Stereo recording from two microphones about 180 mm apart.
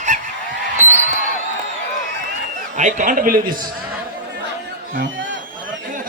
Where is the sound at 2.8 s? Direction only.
45° right (ahead or behind).